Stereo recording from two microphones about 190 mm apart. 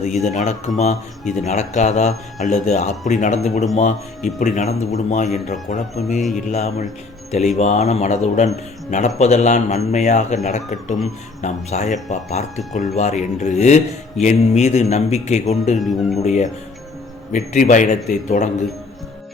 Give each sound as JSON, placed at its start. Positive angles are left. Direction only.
{"t": 0.0, "sound": "speech", "side_deg": 35}
{"t": 15.8, "sound": "speech", "side_deg": 0}
{"t": 16.1, "sound": "speech", "side_deg": 35}